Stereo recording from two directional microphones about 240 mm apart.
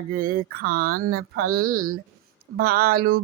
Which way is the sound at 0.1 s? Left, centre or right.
Right.